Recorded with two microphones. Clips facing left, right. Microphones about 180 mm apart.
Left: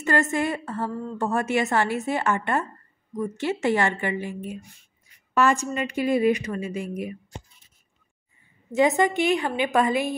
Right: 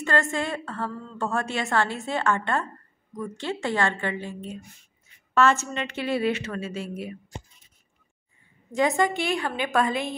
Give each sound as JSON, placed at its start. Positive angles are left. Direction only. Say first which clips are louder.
{"t": 0.0, "sound": "a woman's voice", "louder": "left 3 dB", "side_deg": 20}
{"t": 8.7, "sound": "a woman's voice", "louder": "left 3 dB", "side_deg": 20}